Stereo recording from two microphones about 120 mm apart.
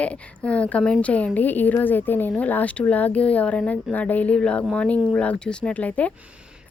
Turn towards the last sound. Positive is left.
turn(degrees=10)  # may be behind; listen again after turning